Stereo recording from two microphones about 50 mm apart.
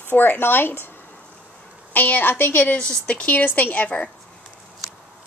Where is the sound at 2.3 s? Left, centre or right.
Left.